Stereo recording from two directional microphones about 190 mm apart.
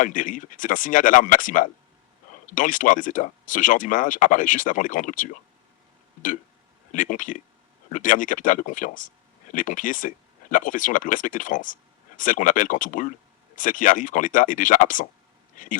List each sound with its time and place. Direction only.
0.0 s speech: 45° left (ahead or behind)
6.9 s speech: 45° left (ahead or behind)